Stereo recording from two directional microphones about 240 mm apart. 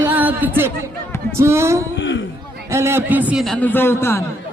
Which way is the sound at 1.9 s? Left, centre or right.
Left.